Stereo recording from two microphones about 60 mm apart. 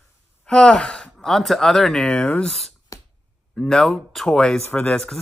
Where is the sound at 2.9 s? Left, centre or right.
Left.